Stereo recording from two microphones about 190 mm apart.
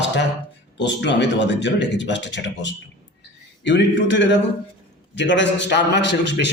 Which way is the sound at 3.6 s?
65° left (ahead or behind).